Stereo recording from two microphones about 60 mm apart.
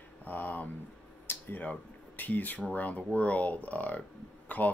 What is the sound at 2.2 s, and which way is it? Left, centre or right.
Speech, left.